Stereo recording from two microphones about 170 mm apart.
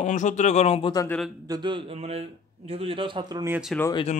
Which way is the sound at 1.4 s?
25° right (ahead or behind).